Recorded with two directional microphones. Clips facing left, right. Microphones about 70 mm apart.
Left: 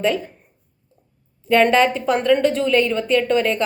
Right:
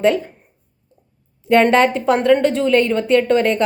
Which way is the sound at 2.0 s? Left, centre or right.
Right.